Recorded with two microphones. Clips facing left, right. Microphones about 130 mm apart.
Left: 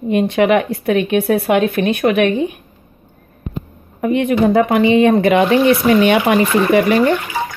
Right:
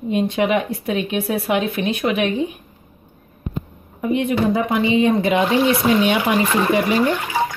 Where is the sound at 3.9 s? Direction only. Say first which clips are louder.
Left 4 dB; 65° left (ahead or behind).